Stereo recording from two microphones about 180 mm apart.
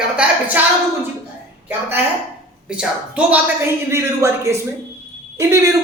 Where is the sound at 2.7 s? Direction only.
5° right (ahead or behind).